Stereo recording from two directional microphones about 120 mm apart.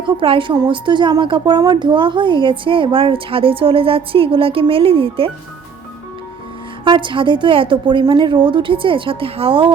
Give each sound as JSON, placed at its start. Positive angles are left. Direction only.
{"t": 0.0, "sound": "a woman's voice", "side_deg": -45}
{"t": 6.8, "sound": "a woman's voice", "side_deg": -45}